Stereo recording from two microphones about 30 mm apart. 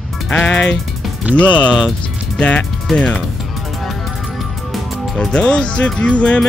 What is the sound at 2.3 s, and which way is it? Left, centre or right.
Speech, left.